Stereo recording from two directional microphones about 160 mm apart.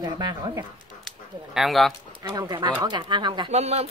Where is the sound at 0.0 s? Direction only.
25° right (ahead or behind).